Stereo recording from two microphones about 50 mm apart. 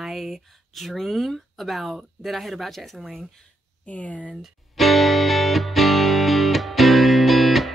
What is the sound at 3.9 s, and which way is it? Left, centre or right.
Speech, left.